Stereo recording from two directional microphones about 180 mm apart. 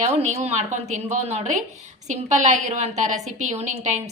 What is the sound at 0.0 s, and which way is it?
A woman's voice, 40° right (ahead or behind).